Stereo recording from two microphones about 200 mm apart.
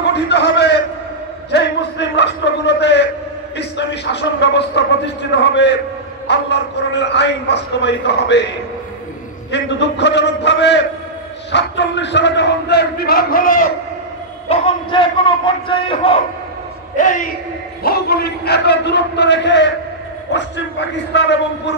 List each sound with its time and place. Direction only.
0.0 s a sound: 60° left (ahead or behind)
3.5 s a man's voice: 60° left (ahead or behind)
9.5 s a man's voice: 60° left (ahead or behind)
14.5 s a man's voice: 25° left (ahead or behind)
16.9 s a man's voice: 40° left (ahead or behind)
17.8 s a man's voice: 50° left (ahead or behind)
21.1 s a man's voice: 60° left (ahead or behind)